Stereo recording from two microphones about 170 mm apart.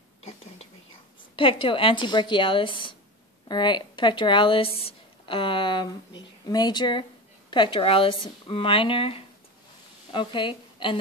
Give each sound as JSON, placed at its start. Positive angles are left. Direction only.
{"t": 1.3, "sound": "a woman's voice", "side_deg": 30}